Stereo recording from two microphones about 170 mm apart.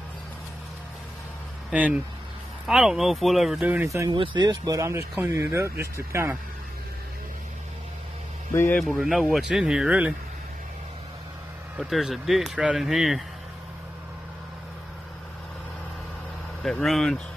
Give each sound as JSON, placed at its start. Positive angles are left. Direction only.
{"t": 1.7, "sound": "speech", "side_deg": -5}
{"t": 4.2, "sound": "speech", "side_deg": -30}
{"t": 8.7, "sound": "speech", "side_deg": 0}
{"t": 11.8, "sound": "speech", "side_deg": 0}
{"t": 16.6, "sound": "speech", "side_deg": 0}